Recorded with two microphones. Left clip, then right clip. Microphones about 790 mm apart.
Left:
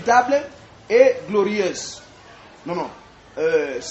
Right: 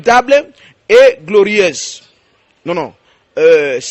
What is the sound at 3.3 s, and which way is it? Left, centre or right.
Speech, right.